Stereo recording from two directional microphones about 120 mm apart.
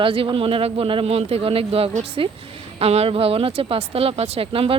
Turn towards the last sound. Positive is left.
turn(degrees=-50)  # may be behind; listen again after turning